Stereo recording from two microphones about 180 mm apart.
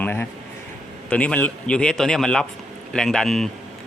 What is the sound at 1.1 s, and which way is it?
Speech, 5° left (ahead or behind).